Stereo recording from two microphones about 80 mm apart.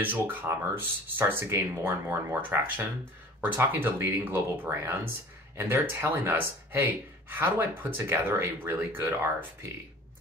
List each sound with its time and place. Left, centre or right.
0.0 s speech: right